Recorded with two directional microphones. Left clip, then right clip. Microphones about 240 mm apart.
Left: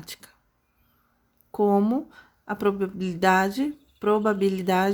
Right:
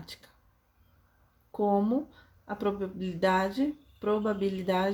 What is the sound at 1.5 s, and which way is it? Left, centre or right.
Speech, left.